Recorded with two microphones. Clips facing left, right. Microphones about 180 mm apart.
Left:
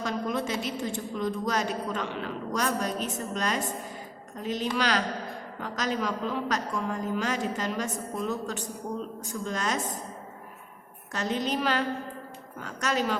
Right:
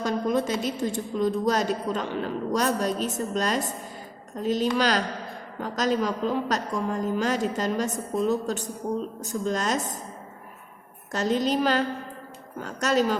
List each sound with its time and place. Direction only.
0.0 s a woman's voice: 40° right (ahead or behind)
11.1 s a woman's voice: 40° right (ahead or behind)